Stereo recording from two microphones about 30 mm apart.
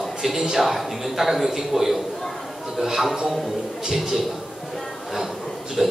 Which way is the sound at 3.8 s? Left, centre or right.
Centre.